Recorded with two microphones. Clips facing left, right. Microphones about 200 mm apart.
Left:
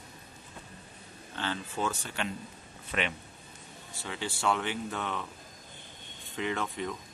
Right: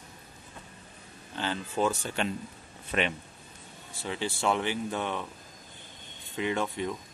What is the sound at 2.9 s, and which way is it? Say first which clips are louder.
Speech: right 4 dB; 35° right (ahead or behind).